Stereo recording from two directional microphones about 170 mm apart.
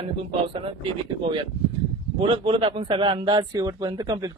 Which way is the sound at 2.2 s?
30° right (ahead or behind).